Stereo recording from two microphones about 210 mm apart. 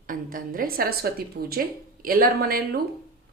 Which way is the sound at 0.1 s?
40° right (ahead or behind).